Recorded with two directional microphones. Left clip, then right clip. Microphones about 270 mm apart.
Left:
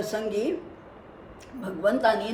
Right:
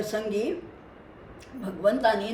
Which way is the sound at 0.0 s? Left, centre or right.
Centre.